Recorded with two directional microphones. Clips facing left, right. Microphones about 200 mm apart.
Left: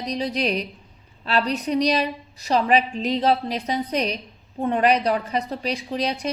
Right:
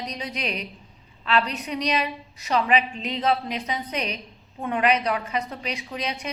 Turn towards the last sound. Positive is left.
turn(degrees=35)  # may be behind; listen again after turning